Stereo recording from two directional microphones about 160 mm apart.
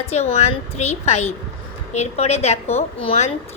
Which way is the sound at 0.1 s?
40° left (ahead or behind).